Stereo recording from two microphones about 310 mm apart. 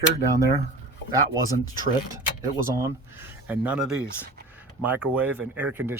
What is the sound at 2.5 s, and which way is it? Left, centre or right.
Speech, centre.